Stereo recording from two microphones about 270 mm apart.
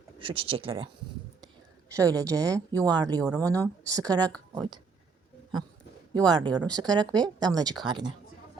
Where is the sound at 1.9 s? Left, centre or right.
Centre.